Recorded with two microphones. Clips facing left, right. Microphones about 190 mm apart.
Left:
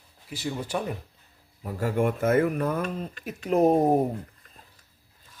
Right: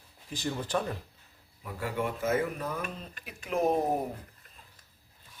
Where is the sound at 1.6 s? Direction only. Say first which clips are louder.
Left 7 dB; 40° left (ahead or behind); by 2.8 s 60° left (ahead or behind).